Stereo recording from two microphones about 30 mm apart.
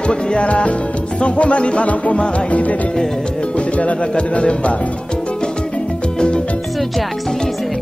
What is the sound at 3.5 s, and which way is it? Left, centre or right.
Speech, left.